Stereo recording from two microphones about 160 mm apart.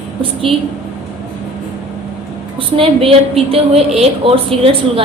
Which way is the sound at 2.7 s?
35° right (ahead or behind).